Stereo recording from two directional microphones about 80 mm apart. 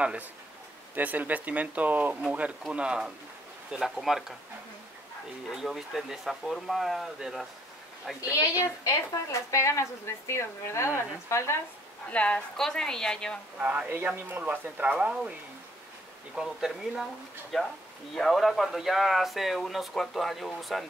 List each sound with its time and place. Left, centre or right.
0.0 s speech: centre
5.5 s speech: centre
8.2 s speech: left
12.1 s a woman's voice: centre
13.6 s speech: centre
16.3 s speech: centre